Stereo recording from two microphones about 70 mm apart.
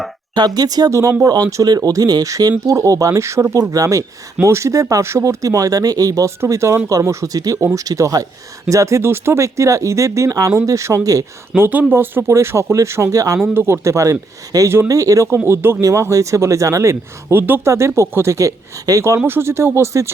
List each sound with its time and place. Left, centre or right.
0.3 s speech: right
0.9 s speech: right
1.2 s speech: right
1.6 s speech: right
6.5 s speech: right
9.0 s speech: right
11.5 s speech: right
12.3 s speech: right
13.5 s speech: right
13.8 s speech: right
15.4 s speech: right
17.3 s speech: right
17.7 s speech: right
19.2 s speech: right